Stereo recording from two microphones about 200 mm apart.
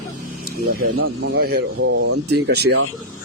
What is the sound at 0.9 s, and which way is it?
Speech, 90° right.